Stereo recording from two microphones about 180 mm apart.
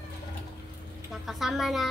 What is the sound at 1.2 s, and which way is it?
Speech, centre (ahead or behind).